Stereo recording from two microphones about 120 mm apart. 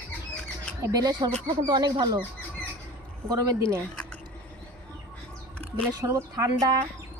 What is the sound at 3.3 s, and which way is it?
Speech, 25° right (ahead or behind).